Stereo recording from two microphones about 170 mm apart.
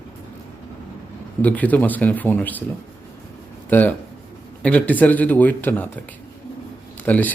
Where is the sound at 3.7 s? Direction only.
10° left (ahead or behind).